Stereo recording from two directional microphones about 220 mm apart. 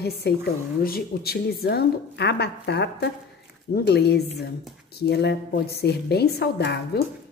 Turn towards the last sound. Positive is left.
turn(degrees=50)  # may be behind; listen again after turning